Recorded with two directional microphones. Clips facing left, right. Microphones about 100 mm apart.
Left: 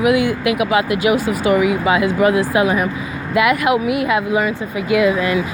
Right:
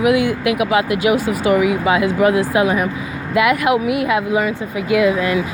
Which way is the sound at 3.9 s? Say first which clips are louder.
Even; 90° right.